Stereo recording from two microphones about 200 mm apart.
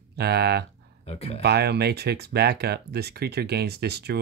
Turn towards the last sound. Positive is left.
turn(degrees=-55)  # may be behind; listen again after turning